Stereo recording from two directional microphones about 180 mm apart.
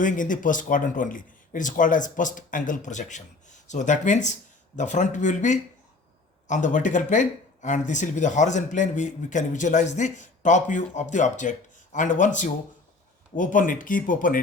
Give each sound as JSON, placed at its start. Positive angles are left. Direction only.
{"t": 0.0, "sound": "speech", "side_deg": 45}